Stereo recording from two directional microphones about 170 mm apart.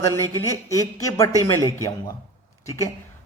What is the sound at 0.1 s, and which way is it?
Speech, 20° left (ahead or behind).